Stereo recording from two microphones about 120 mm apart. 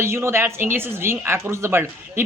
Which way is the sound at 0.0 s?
20° right (ahead or behind).